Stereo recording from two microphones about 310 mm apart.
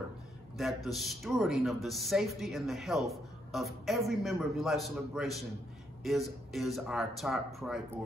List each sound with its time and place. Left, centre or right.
0.6 s speech: centre